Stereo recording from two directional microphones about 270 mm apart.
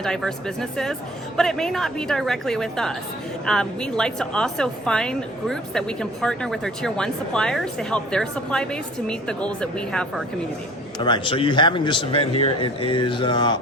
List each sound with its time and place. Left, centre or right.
0.0 s a woman's voice: centre
11.0 s speech: centre